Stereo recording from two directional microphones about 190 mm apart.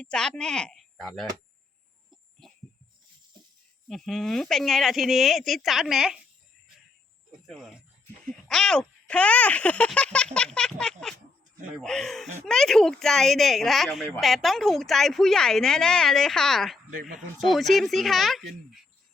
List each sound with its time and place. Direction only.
0.0 s a woman's voice: 5° left (ahead or behind)
2.4 s heart sounds: centre (ahead or behind)
3.8 s a woman's voice: centre (ahead or behind)
7.4 s a woman's voice: centre (ahead or behind)
16.9 s speech: 50° right (ahead or behind)
17.2 s a woman's voice: centre (ahead or behind)